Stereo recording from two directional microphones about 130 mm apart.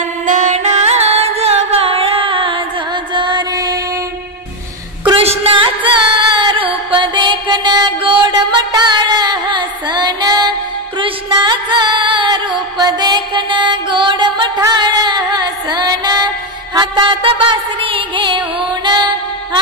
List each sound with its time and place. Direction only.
0.3 s music: 65° right (ahead or behind); by 3.8 s 30° right (ahead or behind)
5.0 s music: 50° right (ahead or behind)